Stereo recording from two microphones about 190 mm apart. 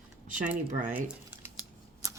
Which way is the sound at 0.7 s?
40° right (ahead or behind).